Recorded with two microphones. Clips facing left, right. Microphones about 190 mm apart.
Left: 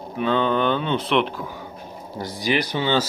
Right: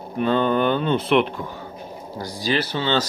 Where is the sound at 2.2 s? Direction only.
15° left (ahead or behind).